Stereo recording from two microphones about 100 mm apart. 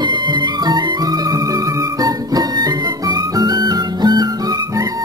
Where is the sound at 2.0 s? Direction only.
40° right (ahead or behind).